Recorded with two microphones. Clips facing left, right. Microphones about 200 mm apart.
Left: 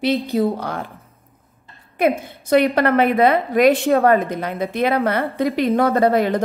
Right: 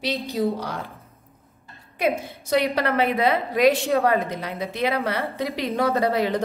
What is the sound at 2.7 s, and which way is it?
A woman's voice, 55° left (ahead or behind).